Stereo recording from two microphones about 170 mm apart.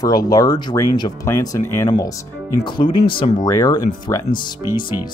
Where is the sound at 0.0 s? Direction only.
20° left (ahead or behind).